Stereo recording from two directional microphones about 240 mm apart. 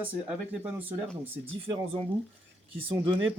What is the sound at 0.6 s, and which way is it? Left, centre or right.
Speech, centre.